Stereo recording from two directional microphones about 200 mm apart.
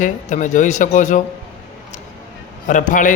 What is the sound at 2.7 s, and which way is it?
Speech, 40° left (ahead or behind).